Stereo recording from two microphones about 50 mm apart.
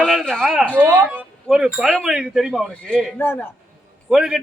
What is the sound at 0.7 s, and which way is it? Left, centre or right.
Speech, right.